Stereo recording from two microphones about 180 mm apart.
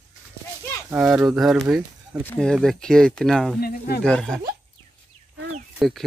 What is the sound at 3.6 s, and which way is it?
Speech, 60° left (ahead or behind).